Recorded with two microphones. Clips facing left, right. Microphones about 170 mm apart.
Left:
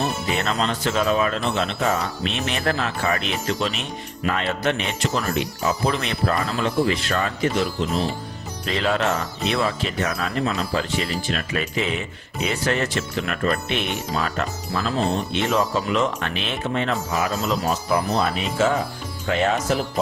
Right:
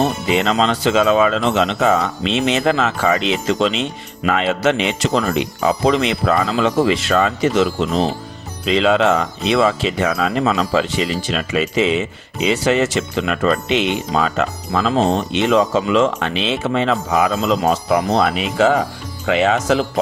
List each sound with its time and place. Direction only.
0.0 s speech: 90° right